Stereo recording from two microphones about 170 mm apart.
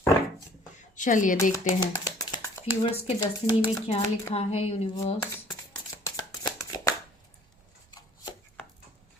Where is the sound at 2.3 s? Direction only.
25° left (ahead or behind).